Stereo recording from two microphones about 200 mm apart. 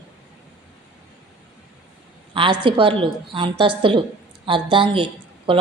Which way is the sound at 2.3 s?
25° right (ahead or behind).